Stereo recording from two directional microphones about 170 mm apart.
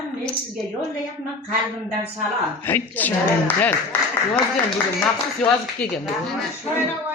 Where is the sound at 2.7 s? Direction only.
10° left (ahead or behind).